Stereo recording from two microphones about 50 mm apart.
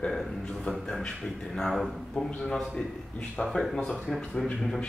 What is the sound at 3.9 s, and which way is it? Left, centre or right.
Speech, centre.